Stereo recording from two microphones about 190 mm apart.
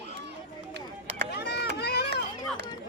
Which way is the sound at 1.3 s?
60° left (ahead or behind).